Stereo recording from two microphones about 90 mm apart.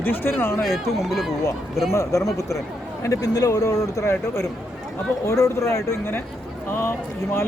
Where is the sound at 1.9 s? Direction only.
35° left (ahead or behind).